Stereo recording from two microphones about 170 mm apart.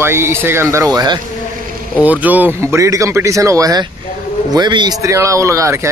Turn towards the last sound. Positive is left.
turn(degrees=-15)  # may be behind; listen again after turning